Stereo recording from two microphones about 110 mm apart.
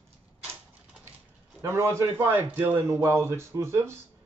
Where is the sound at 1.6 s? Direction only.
25° right (ahead or behind).